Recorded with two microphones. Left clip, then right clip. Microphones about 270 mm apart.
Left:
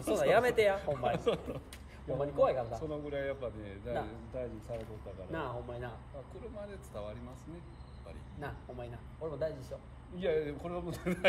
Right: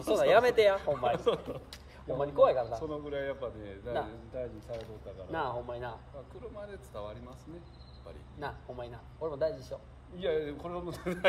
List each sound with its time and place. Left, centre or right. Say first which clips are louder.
0.1 s a man's voice: right 4 dB; centre
8.4 s a man's voice: right 4 dB; centre
10.1 s a man's voice: right 1 dB; centre